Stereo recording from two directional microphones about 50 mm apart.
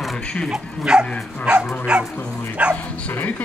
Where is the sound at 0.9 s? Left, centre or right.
Centre.